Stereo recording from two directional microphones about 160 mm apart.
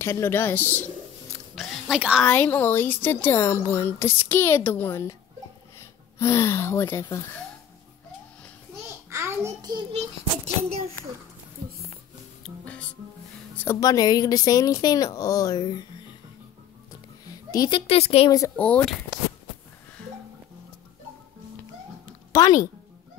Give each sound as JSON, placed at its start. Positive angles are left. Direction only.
{"t": 0.0, "sound": "a woman's voice", "side_deg": 15}
{"t": 1.5, "sound": "a sound", "side_deg": 0}
{"t": 2.2, "sound": "a woman's voice", "side_deg": 10}
{"t": 6.1, "sound": "a woman's voice", "side_deg": 15}
{"t": 9.1, "sound": "a sound", "side_deg": -20}
{"t": 12.4, "sound": "music", "side_deg": 5}
{"t": 13.6, "sound": "speech", "side_deg": 20}
{"t": 17.3, "sound": "speech", "side_deg": 25}
{"t": 18.6, "sound": "a woman's voice", "side_deg": 10}
{"t": 22.3, "sound": "speech", "side_deg": 20}